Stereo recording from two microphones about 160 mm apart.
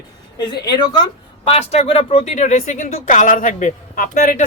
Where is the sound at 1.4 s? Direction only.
40° left (ahead or behind).